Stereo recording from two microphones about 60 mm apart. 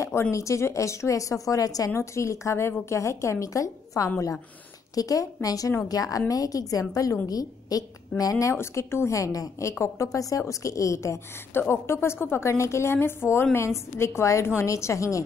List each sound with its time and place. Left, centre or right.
0.0 s a woman's voice: left
2.0 s a woman's voice: left
4.9 s a woman's voice: left
7.2 s a woman's voice: left
8.2 s speech: left
8.5 s a woman's voice: left
11.5 s a woman's voice: left
12.4 s a woman's voice: left